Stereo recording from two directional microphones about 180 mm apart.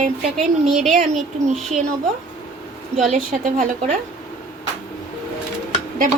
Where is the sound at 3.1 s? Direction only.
45° right (ahead or behind).